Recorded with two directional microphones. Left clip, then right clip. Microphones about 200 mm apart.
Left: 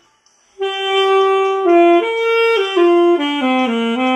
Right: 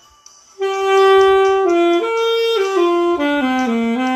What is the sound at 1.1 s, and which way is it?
Music, 5° right (ahead or behind).